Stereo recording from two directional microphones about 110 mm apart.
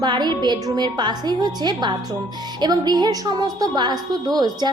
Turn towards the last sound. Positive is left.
turn(degrees=-35)  # may be behind; listen again after turning